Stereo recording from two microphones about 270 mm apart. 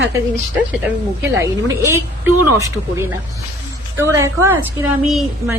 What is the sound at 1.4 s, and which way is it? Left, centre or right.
A woman's voice, centre.